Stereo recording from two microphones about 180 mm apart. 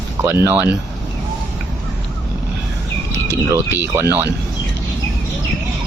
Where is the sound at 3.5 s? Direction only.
15° right (ahead or behind).